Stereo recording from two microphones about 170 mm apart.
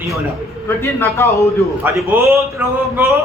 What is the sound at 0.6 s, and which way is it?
A man's voice, 15° left (ahead or behind).